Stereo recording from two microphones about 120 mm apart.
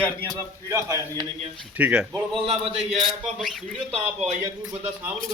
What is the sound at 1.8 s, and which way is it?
Speech, 10° right (ahead or behind).